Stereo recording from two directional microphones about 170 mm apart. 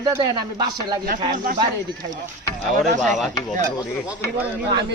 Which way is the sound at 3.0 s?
Centre (ahead or behind).